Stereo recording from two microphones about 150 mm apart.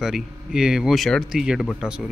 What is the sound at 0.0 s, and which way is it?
A man's voice, 5° right (ahead or behind).